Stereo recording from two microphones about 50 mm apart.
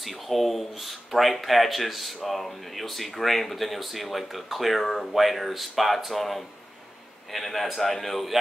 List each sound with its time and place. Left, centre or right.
0.0 s speech: centre